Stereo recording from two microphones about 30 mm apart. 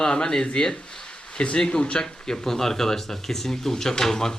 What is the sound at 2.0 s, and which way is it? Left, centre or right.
Speech, left.